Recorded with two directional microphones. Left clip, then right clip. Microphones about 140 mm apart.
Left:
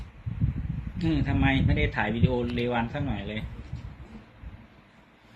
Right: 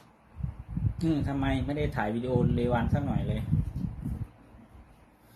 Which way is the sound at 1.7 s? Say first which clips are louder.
Left 3 dB; centre (ahead or behind).